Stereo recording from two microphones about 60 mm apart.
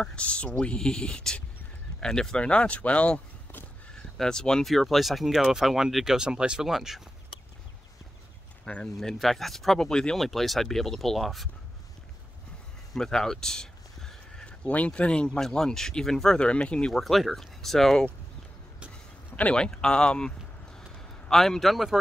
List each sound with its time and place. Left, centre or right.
0.0 s speech: centre
4.2 s speech: centre
8.6 s speech: centre
9.2 s speech: centre
12.9 s a sound: centre
14.9 s speech: centre
16.9 s speech: centre
19.3 s speech: centre